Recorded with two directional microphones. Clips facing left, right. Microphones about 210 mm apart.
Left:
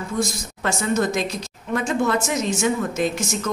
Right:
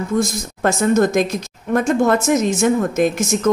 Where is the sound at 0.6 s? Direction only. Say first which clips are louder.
Right 7 dB; 45° right (ahead or behind).